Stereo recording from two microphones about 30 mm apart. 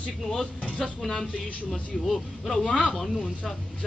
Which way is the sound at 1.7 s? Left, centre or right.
Centre.